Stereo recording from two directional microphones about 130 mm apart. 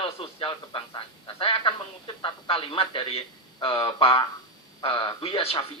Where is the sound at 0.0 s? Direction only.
45° left (ahead or behind).